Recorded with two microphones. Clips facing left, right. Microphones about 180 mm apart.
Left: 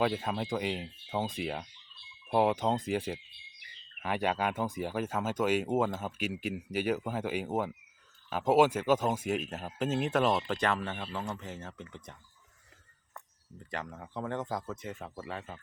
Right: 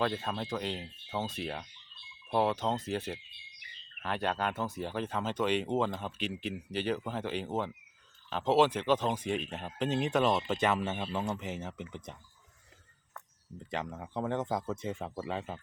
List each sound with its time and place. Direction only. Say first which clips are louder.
0.0 s speech: left 2 dB; 10° left (ahead or behind)
10.8 s speech: right 3 dB; 20° right (ahead or behind)
13.7 s speech: right 3 dB; 20° right (ahead or behind)